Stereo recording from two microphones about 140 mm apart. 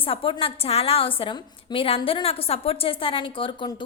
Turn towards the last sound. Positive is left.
turn(degrees=35)  # may be behind; listen again after turning